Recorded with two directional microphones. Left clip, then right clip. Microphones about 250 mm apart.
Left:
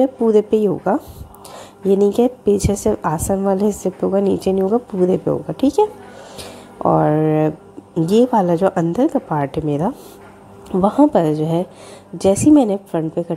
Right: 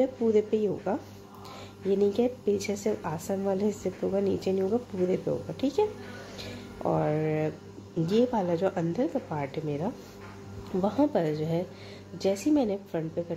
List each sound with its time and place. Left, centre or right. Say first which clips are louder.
0.0 s a woman's voice: left 10 dB; left
6.3 s music: left 12 dB; left
8.1 s a woman's voice: left 12 dB; left